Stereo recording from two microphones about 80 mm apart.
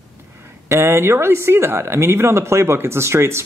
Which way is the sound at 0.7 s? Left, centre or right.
Right.